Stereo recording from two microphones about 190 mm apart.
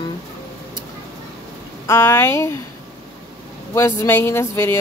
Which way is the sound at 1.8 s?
15° left (ahead or behind).